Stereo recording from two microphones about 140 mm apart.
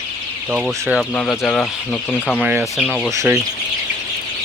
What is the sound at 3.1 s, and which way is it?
Speech, 20° right (ahead or behind).